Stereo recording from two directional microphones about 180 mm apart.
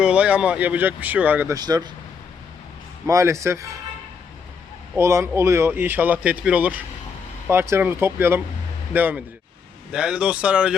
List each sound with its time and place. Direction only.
0.0 s speech: 5° right (ahead or behind)
1.5 s speech: 20° right (ahead or behind)
3.1 s speech: 15° right (ahead or behind)
4.9 s speech: 15° right (ahead or behind)